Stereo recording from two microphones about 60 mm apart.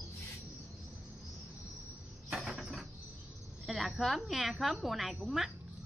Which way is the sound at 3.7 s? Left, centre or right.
Centre.